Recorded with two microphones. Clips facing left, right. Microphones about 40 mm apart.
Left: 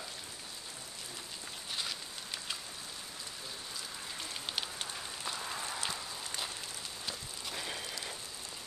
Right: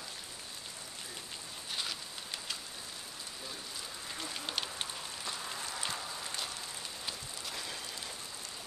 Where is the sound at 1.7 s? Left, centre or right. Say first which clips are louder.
Right 1 dB; centre.